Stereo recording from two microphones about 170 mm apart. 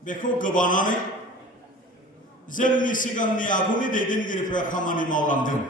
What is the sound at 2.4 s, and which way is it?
A man's voice, 50° left (ahead or behind).